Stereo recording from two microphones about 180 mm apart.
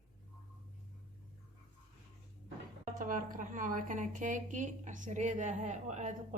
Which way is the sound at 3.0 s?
50° right (ahead or behind).